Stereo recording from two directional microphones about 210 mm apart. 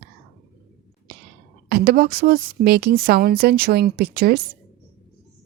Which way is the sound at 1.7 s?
45° right (ahead or behind).